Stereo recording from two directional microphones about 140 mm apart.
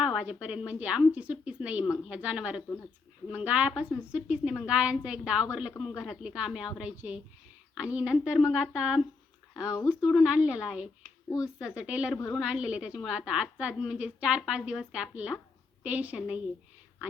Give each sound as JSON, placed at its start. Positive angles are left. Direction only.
{"t": 0.0, "sound": "a woman's voice", "side_deg": -5}
{"t": 9.6, "sound": "speech", "side_deg": 20}
{"t": 9.9, "sound": "a woman's voice", "side_deg": -5}